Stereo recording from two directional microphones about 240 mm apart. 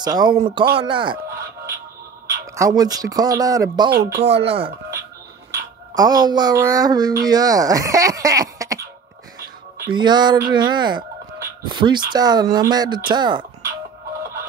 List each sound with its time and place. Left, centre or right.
0.0 s speech: centre
2.2 s speech: centre
9.8 s speech: centre